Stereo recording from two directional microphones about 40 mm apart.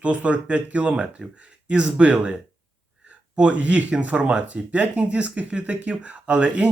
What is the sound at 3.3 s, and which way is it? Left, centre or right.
Speech, right.